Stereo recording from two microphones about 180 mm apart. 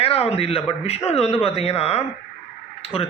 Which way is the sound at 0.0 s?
35° left (ahead or behind).